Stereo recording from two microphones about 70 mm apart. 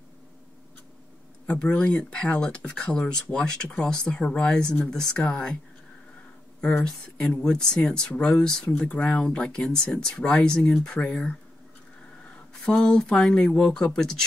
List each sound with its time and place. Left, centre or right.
1.5 s speech: centre
6.8 s speech: centre
12.6 s speech: centre